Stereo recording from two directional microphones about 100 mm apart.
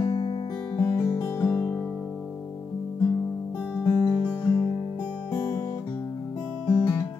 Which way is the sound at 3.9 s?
15° left (ahead or behind).